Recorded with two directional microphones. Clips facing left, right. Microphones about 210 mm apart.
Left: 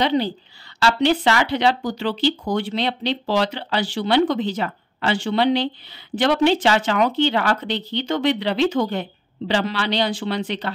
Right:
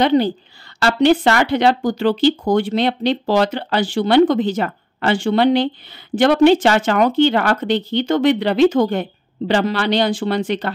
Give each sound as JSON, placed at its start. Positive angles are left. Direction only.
{"t": 0.0, "sound": "speech", "side_deg": -50}